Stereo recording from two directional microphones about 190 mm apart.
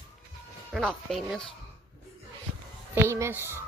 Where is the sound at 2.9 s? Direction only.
15° right (ahead or behind).